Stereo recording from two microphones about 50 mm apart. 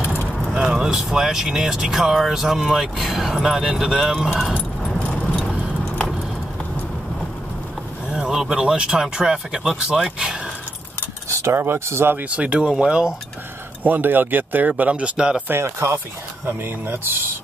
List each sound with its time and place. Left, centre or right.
0.0 s keys jangling: left
0.4 s speech: centre
4.9 s keys jangling: left
8.3 s speech: centre
11.2 s a sound: right
11.5 s speech: right
12.2 s speech: right
13.8 s speech: right
15.4 s speech: right
16.4 s speech: right